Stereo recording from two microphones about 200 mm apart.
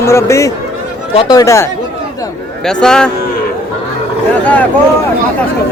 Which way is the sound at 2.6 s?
5° left (ahead or behind).